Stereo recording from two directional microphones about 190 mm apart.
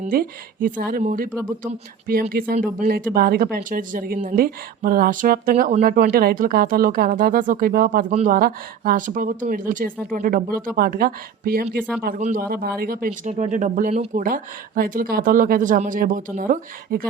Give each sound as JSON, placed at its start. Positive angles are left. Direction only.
{"t": 0.0, "sound": "speech", "side_deg": -50}
{"t": 13.3, "sound": "speech", "side_deg": -40}